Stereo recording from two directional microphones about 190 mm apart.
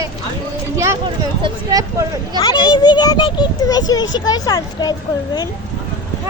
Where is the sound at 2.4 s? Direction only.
25° left (ahead or behind).